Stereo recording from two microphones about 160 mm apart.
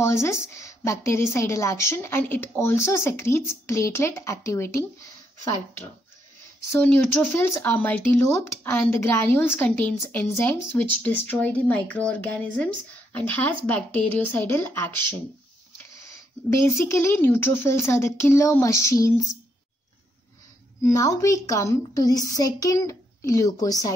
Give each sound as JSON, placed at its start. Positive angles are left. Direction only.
{"t": 0.0, "sound": "a woman's voice", "side_deg": 15}
{"t": 6.7, "sound": "a woman's voice", "side_deg": 10}
{"t": 16.5, "sound": "a woman's voice", "side_deg": 15}
{"t": 20.8, "sound": "a woman's voice", "side_deg": 20}